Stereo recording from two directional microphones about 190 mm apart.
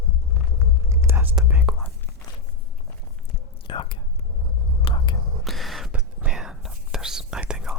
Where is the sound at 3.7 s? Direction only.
25° left (ahead or behind).